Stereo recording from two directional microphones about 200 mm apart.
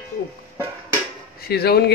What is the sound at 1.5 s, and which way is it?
Speech, 50° left (ahead or behind).